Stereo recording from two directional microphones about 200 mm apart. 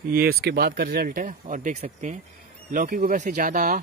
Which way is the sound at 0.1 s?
50° right (ahead or behind).